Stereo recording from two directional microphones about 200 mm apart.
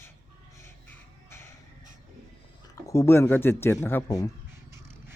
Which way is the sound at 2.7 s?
15° left (ahead or behind).